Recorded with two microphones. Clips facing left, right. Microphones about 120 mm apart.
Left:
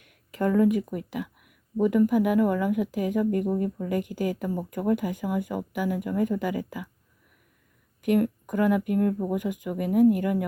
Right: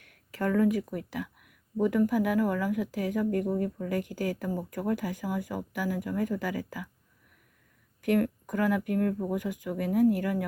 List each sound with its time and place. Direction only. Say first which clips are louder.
0.0 s speech: left 4 dB; 20° left (ahead or behind)
8.0 s speech: left 3 dB; 20° left (ahead or behind)